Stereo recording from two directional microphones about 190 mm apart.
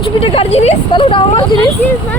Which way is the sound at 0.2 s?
30° left (ahead or behind).